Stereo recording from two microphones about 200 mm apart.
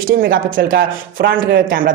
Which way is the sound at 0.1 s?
50° right (ahead or behind).